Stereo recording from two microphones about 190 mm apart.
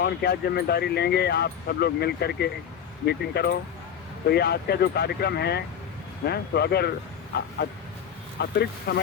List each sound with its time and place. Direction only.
0.0 s speech: 55° left (ahead or behind)
8.4 s speech: 60° left (ahead or behind)